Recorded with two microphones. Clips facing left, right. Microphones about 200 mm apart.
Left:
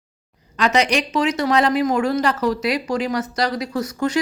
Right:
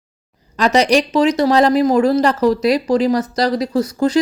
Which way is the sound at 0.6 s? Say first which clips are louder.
Right 5 dB; 40° right (ahead or behind).